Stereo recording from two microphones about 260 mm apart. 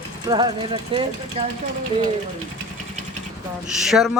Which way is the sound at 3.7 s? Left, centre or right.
Centre.